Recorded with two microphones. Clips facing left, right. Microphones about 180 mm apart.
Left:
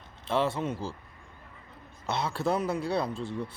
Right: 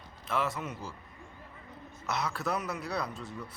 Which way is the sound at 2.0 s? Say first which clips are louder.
Left 4 dB; 30° left (ahead or behind).